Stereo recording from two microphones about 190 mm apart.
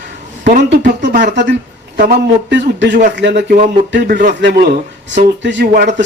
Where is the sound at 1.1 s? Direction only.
45° right (ahead or behind).